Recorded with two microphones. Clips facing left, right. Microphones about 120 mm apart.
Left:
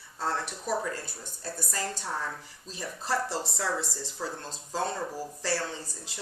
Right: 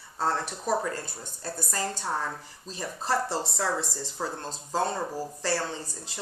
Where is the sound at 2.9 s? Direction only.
25° right (ahead or behind).